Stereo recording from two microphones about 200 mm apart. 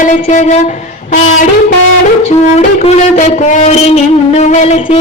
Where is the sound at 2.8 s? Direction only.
35° left (ahead or behind).